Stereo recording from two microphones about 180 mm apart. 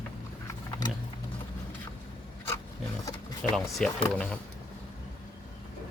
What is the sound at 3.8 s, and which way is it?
Speech, 5° left (ahead or behind).